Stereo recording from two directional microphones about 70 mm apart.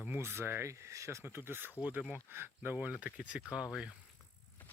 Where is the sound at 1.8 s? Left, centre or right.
Right.